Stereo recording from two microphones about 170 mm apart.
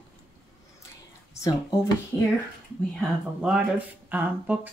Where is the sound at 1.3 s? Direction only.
20° left (ahead or behind).